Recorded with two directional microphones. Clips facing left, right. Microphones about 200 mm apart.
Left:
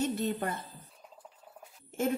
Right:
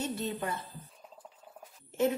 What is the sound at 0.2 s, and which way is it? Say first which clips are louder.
Speech: left 2 dB; 50° left (ahead or behind).